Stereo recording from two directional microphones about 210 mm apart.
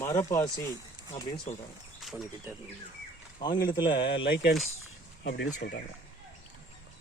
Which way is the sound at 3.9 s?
55° left (ahead or behind).